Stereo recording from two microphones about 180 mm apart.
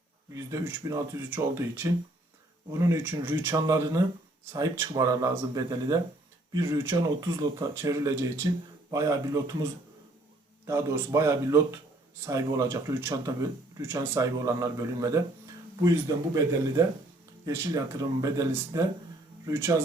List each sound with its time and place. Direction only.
0.3 s speech: 15° right (ahead or behind)
10.7 s speech: 15° right (ahead or behind)